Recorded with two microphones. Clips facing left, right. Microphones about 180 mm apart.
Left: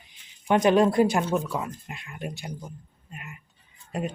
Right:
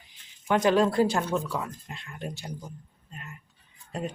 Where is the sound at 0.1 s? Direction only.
20° left (ahead or behind).